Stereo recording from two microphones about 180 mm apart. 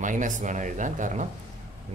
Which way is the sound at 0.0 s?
45° right (ahead or behind).